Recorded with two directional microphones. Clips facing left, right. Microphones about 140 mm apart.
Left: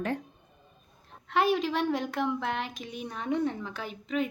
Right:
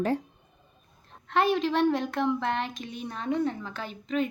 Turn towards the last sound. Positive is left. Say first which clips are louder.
# right 2 dB
turn(degrees=10)  # may be behind; listen again after turning